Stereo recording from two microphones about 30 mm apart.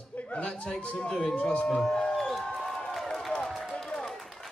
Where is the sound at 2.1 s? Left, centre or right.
Centre.